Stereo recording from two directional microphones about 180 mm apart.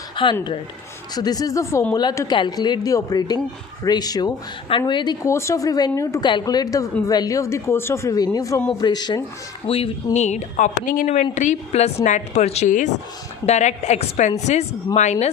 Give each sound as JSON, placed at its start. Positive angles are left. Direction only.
{"t": 0.2, "sound": "speech", "side_deg": 30}